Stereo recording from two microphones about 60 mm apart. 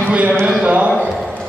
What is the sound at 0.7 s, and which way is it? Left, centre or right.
Speech, right.